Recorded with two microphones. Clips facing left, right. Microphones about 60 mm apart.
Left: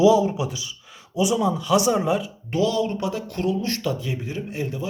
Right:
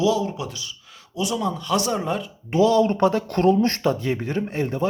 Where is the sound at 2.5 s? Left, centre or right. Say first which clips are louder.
Right 5 dB; right.